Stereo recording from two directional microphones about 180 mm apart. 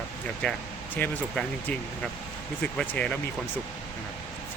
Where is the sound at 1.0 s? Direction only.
5° left (ahead or behind).